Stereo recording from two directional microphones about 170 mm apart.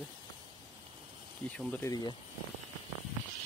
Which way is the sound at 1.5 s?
10° left (ahead or behind).